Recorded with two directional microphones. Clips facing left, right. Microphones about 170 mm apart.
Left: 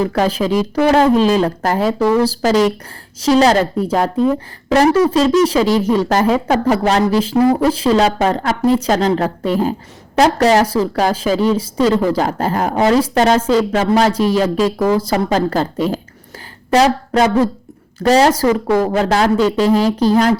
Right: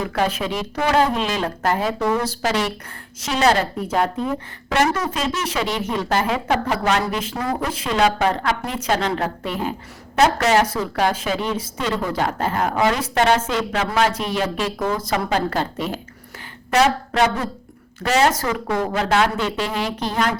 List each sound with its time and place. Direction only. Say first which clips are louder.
0.0 s a woman's voice: left 6 dB; 35° left (ahead or behind)